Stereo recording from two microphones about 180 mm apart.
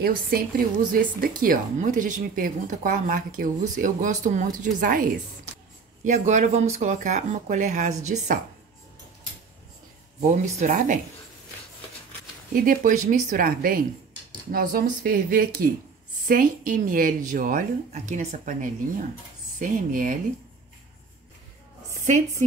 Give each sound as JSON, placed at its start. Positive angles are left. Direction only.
{"t": 0.0, "sound": "speech", "side_deg": -55}
{"t": 6.0, "sound": "speech", "side_deg": -40}
{"t": 12.6, "sound": "speech", "side_deg": -45}
{"t": 21.9, "sound": "music", "side_deg": -40}